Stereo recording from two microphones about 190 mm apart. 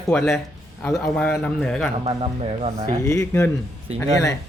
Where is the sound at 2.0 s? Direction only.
30° right (ahead or behind).